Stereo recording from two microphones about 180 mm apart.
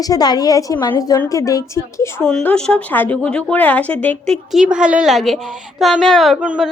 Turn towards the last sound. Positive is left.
turn(degrees=-5)  # may be behind; listen again after turning